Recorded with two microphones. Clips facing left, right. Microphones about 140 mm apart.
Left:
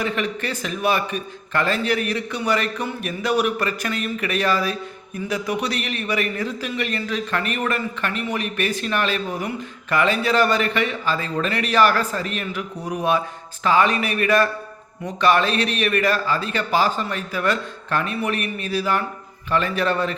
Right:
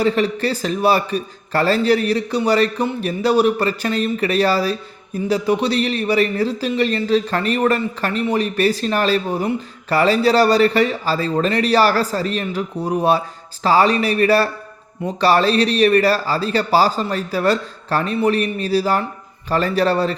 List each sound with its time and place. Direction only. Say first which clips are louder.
0.0 s a man's voice: right 7 dB; 35° right (ahead or behind)